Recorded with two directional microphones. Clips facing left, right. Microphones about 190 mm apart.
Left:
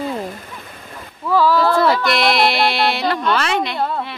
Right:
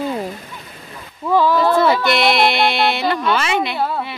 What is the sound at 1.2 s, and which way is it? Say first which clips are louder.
Speech: even; 20° right (ahead or behind).